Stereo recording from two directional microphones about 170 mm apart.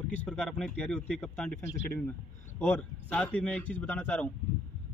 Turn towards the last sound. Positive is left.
turn(degrees=10)  # may be behind; listen again after turning